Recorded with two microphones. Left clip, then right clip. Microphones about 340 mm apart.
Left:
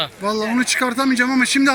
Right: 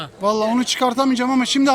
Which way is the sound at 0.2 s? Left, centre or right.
Centre.